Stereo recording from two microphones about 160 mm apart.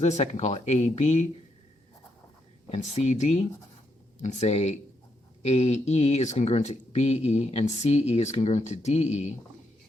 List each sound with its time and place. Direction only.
0.0 s speech: 45° left (ahead or behind)
2.6 s speech: 40° left (ahead or behind)